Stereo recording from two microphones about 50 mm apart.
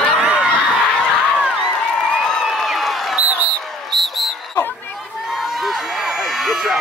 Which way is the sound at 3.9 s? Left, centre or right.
Centre.